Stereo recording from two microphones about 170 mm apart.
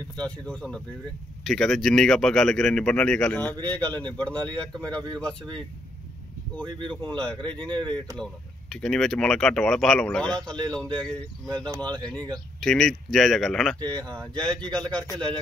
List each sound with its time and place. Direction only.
0.1 s speech: 5° left (ahead or behind)
6.9 s speech: 10° left (ahead or behind)
11.6 s speech: 25° right (ahead or behind)
11.9 s speech: 5° left (ahead or behind)